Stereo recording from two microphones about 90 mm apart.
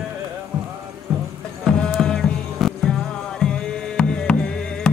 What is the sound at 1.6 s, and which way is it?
Music, 5° left (ahead or behind).